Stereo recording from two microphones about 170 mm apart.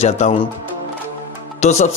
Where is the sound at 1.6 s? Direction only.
40° left (ahead or behind).